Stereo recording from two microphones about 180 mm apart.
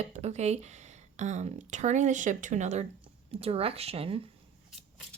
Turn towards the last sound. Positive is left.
turn(degrees=-30)  # may be behind; listen again after turning